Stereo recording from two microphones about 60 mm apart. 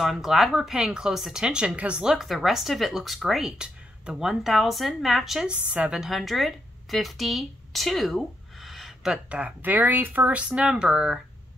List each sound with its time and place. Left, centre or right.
0.0 s speech: centre
2.1 s speech: centre
5.5 s speech: centre
5.9 s speech: centre
9.1 s speech: right